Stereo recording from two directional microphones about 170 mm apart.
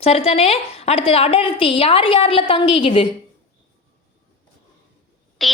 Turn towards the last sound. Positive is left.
turn(degrees=0)  # may be behind; listen again after turning